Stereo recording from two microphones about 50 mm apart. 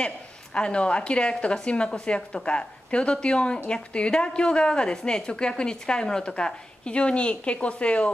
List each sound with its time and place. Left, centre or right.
0.6 s a woman's voice: left